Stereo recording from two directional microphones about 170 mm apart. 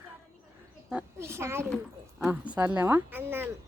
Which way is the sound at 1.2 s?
15° right (ahead or behind).